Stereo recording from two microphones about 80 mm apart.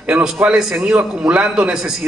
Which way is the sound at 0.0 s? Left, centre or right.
Centre.